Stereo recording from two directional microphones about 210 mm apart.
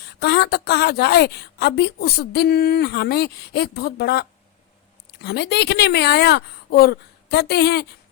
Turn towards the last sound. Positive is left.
turn(degrees=50)  # may be behind; listen again after turning